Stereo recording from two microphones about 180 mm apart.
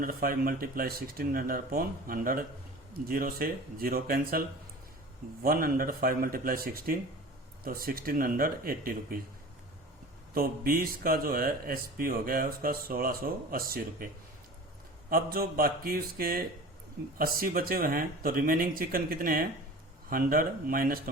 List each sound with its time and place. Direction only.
0.0 s speech: 55° right (ahead or behind)
10.3 s speech: 55° right (ahead or behind)
15.1 s speech: 55° right (ahead or behind)